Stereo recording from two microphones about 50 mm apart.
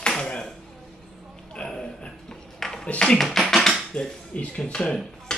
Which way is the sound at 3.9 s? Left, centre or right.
Left.